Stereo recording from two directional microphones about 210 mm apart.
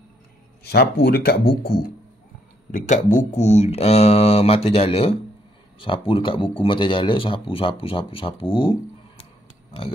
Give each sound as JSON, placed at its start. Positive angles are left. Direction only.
{"t": 0.7, "sound": "speech", "side_deg": 50}
{"t": 2.7, "sound": "speech", "side_deg": 40}